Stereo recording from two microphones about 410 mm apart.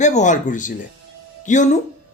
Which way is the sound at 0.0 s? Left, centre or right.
Centre.